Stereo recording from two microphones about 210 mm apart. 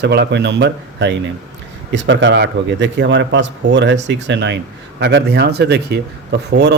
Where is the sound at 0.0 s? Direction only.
55° right (ahead or behind).